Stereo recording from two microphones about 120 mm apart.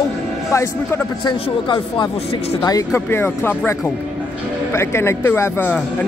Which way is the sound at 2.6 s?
25° left (ahead or behind).